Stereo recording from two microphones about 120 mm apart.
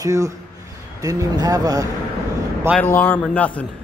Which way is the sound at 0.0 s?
30° right (ahead or behind).